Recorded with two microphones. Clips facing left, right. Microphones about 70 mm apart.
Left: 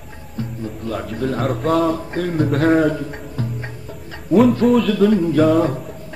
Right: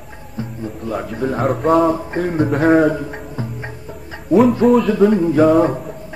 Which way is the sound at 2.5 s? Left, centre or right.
Centre.